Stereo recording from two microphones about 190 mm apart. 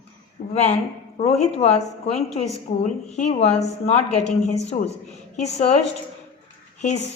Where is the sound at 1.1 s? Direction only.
35° left (ahead or behind).